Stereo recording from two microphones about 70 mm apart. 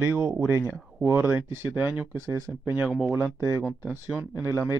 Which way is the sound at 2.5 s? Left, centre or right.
Right.